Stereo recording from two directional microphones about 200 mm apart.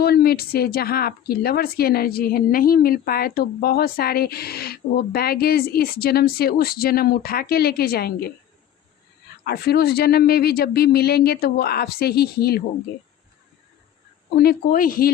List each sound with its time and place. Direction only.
0.0 s speech: 50° left (ahead or behind)
9.4 s speech: 50° left (ahead or behind)
14.3 s speech: 50° left (ahead or behind)